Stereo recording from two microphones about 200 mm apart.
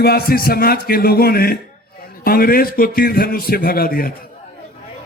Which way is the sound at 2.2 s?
45° left (ahead or behind).